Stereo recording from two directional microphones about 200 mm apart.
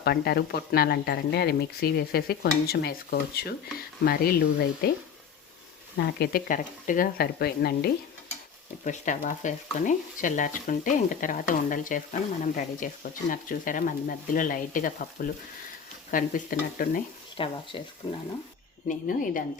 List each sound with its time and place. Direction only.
0.0 s speech: 50° left (ahead or behind)
6.1 s speech: 50° left (ahead or behind)
8.8 s stir: 40° left (ahead or behind)
16.1 s speech: 45° left (ahead or behind)
17.3 s speech: 25° left (ahead or behind)
18.9 s speech: 40° left (ahead or behind)